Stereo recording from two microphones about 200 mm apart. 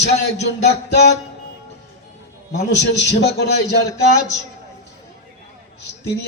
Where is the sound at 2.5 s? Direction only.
60° left (ahead or behind).